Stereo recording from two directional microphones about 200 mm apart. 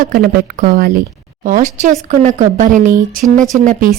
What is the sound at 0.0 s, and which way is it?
Speech, 45° right (ahead or behind).